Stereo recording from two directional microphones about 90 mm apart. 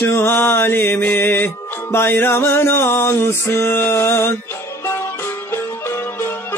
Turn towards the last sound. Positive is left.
turn(degrees=25)  # may be behind; listen again after turning